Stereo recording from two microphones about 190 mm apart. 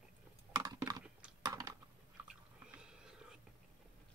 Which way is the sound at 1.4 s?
20° right (ahead or behind).